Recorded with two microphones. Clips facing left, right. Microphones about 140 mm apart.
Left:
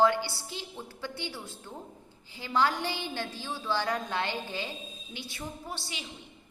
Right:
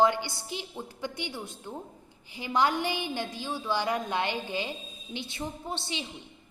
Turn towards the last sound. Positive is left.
turn(degrees=-25)  # may be behind; listen again after turning